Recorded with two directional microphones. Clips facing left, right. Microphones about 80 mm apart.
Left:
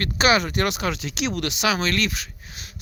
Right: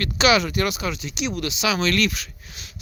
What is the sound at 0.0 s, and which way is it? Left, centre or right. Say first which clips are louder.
Speech: right 1 dB; left.